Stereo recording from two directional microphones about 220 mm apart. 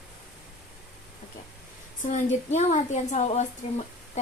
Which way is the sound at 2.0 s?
30° left (ahead or behind).